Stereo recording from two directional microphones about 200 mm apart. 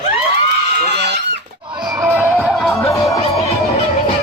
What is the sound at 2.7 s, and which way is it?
Music, 15° left (ahead or behind).